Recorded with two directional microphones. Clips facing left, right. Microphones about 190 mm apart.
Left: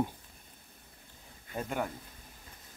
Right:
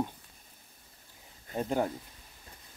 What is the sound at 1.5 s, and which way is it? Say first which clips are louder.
Speech: right 5 dB; 30° right (ahead or behind).